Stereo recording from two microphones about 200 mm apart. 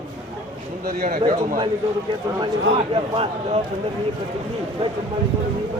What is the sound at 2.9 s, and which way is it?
Speech, 30° right (ahead or behind).